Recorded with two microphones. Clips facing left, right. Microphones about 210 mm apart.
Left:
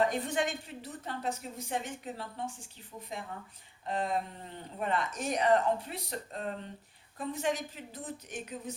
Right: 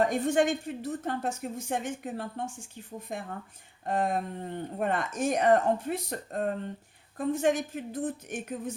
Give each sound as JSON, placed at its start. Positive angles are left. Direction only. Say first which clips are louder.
{"t": 0.0, "sound": "a woman's voice", "louder": "right 5 dB", "side_deg": -45}